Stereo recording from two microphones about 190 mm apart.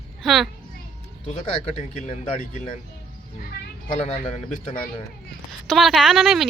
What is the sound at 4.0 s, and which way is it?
Speech, 35° left (ahead or behind).